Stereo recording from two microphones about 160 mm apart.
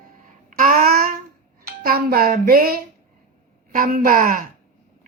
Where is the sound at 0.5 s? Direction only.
60° right (ahead or behind).